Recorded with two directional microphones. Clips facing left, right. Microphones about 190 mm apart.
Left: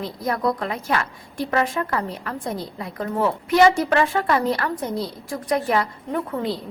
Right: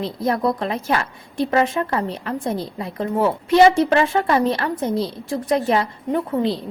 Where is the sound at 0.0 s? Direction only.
25° right (ahead or behind).